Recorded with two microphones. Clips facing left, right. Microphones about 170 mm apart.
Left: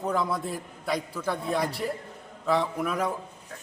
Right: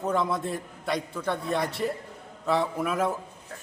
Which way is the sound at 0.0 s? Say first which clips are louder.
Right 1 dB; centre (ahead or behind).